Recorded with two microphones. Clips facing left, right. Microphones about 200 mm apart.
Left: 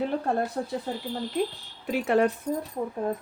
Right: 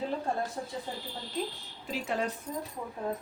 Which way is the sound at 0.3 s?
65° left (ahead or behind).